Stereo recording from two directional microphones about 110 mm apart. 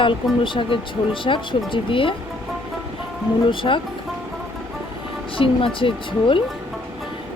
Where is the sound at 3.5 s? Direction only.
50° left (ahead or behind).